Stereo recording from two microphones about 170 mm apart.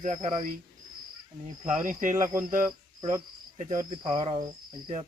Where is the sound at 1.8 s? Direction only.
50° right (ahead or behind).